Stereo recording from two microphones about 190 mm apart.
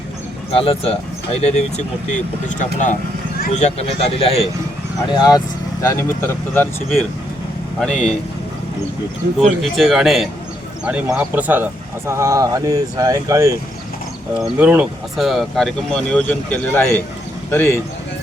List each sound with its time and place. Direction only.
0.5 s speech: 30° left (ahead or behind); by 8.1 s 5° left (ahead or behind)
9.4 s speech: centre (ahead or behind)